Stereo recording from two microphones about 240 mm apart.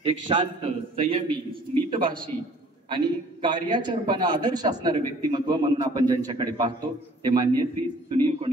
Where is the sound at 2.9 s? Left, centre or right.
Centre.